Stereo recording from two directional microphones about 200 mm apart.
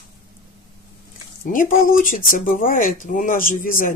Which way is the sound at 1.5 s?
45° left (ahead or behind).